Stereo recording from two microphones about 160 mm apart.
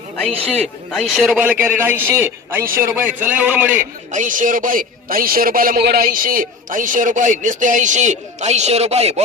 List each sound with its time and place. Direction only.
0.5 s a man's voice: 5° left (ahead or behind); by 3.8 s 10° right (ahead or behind)
3.8 s speech: 55° right (ahead or behind)